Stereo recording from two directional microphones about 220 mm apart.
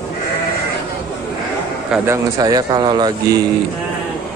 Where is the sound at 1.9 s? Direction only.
10° right (ahead or behind).